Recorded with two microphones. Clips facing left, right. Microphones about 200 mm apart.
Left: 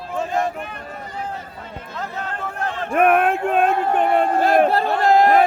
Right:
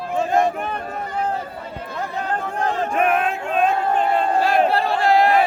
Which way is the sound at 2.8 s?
55° left (ahead or behind).